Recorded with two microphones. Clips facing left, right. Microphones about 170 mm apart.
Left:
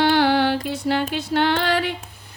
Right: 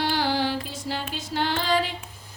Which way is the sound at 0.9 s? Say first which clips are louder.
Left 9 dB; 65° left (ahead or behind).